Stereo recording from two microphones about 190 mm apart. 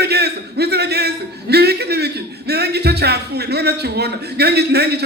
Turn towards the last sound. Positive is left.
turn(degrees=-60)  # may be behind; listen again after turning